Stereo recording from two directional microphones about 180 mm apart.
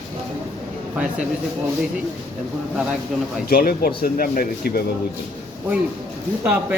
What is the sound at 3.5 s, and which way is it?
Speech, 55° left (ahead or behind).